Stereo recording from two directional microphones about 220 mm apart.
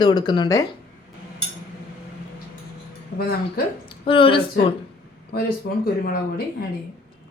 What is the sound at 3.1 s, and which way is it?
Speech, 45° left (ahead or behind).